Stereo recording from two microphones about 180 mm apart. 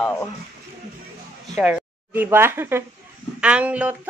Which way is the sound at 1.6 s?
5° right (ahead or behind).